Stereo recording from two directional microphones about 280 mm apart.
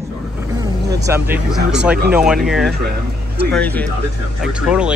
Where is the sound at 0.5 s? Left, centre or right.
Centre.